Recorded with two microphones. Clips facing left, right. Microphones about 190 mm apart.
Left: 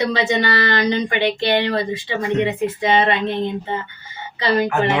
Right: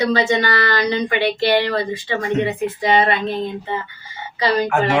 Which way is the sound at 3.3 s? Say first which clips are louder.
Left 1 dB; 25° left (ahead or behind).